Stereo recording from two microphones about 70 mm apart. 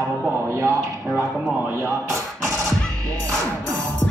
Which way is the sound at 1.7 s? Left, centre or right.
Right.